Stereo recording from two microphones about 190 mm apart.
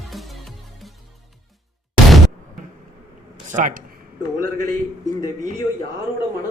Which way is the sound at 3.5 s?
45° right (ahead or behind).